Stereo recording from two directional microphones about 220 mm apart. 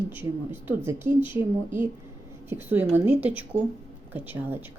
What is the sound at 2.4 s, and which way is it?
A woman's voice, 10° right (ahead or behind).